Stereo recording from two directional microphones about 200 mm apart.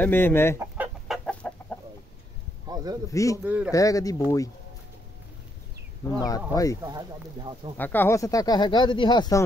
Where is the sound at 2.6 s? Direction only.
20° right (ahead or behind).